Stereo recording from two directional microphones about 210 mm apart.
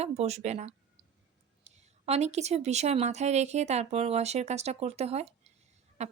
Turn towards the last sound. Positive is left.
turn(degrees=-30)  # may be behind; listen again after turning